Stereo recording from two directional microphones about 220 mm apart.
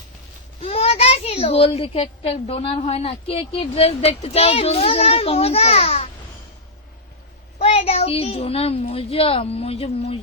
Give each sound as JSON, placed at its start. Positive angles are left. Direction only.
{"t": 0.6, "sound": "a child's voice", "side_deg": 25}
{"t": 7.6, "sound": "a child's voice", "side_deg": 25}